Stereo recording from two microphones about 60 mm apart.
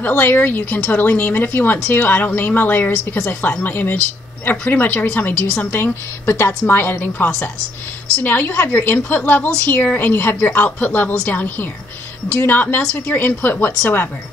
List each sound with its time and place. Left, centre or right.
0.0 s speech: left
5.8 s speech: left